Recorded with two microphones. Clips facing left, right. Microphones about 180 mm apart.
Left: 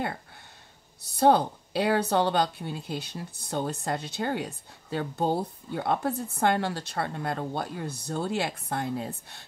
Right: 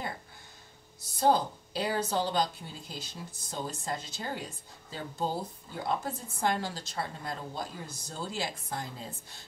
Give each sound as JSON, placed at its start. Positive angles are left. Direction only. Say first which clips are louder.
{"t": 1.0, "sound": "a woman's voice", "louder": "left 5 dB", "side_deg": 65}